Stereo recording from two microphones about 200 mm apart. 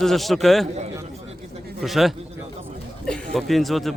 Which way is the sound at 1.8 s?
Centre (ahead or behind).